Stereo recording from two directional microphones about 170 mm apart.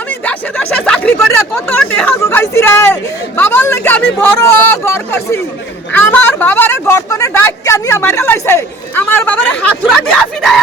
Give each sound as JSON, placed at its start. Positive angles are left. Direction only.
{"t": 0.1, "sound": "a woman's voice", "side_deg": 10}